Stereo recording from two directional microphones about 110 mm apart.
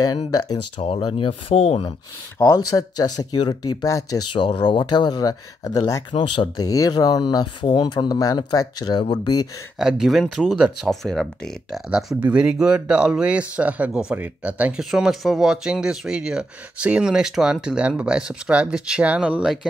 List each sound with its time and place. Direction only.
0.7 s speech: 65° left (ahead or behind)
2.3 s speech: 25° left (ahead or behind)
4.3 s speech: 50° left (ahead or behind); by 6.0 s 30° left (ahead or behind)
6.1 s speech: 45° left (ahead or behind)
9.8 s speech: 5° right (ahead or behind)
12.2 s speech: 10° right (ahead or behind)